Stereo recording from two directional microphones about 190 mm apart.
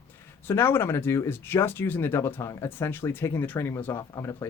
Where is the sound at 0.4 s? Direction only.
10° left (ahead or behind).